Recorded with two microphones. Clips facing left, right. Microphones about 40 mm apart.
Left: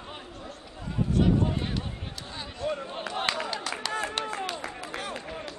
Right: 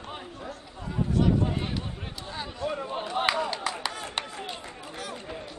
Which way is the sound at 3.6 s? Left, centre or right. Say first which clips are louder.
Right 2 dB; centre.